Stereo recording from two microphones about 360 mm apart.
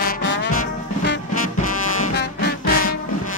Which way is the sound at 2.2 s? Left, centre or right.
Left.